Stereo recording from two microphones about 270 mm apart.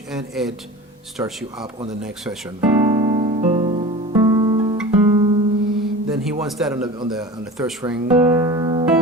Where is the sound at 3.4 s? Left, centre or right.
Right.